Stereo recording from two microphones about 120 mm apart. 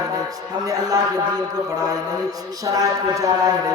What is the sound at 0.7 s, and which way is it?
Speech, 30° right (ahead or behind).